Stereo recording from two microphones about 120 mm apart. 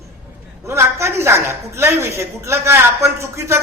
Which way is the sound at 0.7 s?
25° right (ahead or behind).